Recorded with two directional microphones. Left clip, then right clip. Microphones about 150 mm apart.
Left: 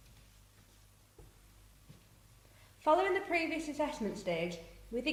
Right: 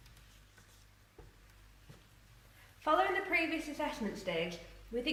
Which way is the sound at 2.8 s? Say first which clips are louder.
Left 1 dB; 55° left (ahead or behind).